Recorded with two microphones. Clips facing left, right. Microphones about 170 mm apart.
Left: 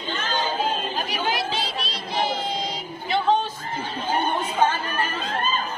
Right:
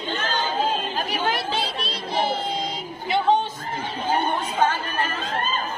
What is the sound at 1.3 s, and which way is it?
Chatter, 60° right (ahead or behind).